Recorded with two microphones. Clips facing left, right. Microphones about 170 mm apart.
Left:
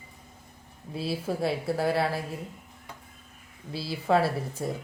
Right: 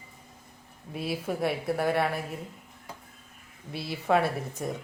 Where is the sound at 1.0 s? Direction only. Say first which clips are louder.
Left 1 dB; 30° left (ahead or behind).